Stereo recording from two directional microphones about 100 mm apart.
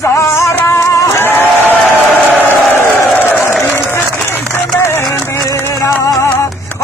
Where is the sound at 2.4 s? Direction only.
20° left (ahead or behind).